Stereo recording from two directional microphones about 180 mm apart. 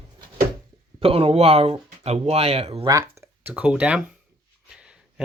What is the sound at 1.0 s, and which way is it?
Speech, 30° right (ahead or behind).